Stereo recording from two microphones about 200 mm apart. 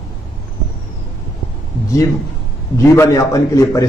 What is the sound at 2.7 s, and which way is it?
A man's voice, 15° left (ahead or behind).